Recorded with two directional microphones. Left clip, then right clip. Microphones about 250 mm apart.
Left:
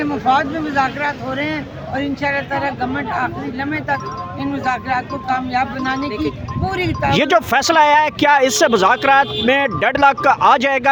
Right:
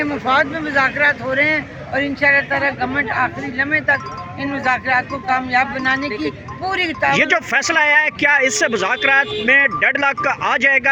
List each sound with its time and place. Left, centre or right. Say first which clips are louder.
0.0 s speech: even; centre
7.1 s speech: left 2 dB; centre